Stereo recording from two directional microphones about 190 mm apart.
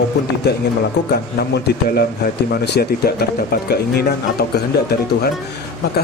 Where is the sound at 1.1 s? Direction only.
55° left (ahead or behind).